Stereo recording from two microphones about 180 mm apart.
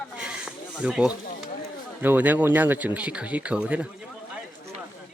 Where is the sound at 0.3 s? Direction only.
5° right (ahead or behind).